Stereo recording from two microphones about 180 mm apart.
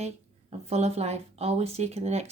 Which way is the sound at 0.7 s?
35° right (ahead or behind).